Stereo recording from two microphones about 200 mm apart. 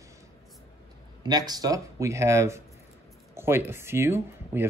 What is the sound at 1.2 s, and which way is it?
Speech, 20° right (ahead or behind).